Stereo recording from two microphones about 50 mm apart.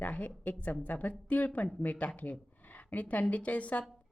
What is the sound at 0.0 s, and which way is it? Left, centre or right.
A woman's voice, left.